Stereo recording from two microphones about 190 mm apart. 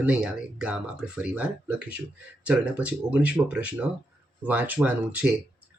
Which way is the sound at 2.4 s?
5° right (ahead or behind).